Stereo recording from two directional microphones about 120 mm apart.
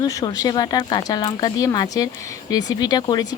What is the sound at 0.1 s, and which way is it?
Speech, 30° left (ahead or behind).